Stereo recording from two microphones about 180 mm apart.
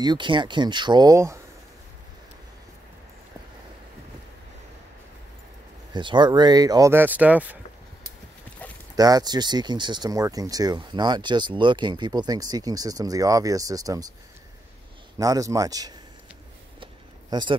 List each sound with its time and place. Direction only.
0.0 s speech: 25° right (ahead or behind)
5.9 s speech: 25° right (ahead or behind); by 7.5 s 10° right (ahead or behind)
8.9 s speech: 20° right (ahead or behind)
15.1 s speech: 20° right (ahead or behind)
16.8 s a sound: 25° right (ahead or behind)